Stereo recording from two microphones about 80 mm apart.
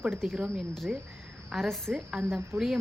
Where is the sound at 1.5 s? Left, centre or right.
Centre.